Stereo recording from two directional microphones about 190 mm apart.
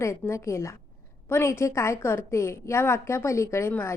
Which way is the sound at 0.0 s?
15° left (ahead or behind).